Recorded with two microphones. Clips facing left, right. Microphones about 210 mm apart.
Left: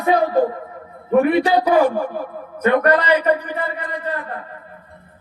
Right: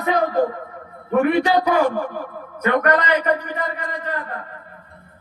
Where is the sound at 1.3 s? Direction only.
30° left (ahead or behind).